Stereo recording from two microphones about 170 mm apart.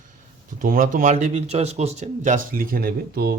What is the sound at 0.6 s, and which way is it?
Speech, 55° right (ahead or behind).